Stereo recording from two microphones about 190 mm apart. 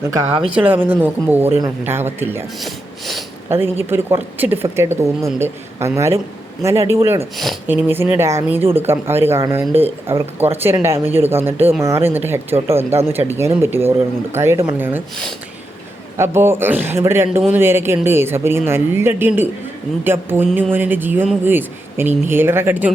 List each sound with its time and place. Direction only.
0.0 s speech: 15° right (ahead or behind)
2.6 s a sound: centre (ahead or behind)
3.5 s speech: 10° right (ahead or behind)
7.3 s speech: centre (ahead or behind)
7.7 s speech: 10° right (ahead or behind)
16.1 s speech: 15° right (ahead or behind)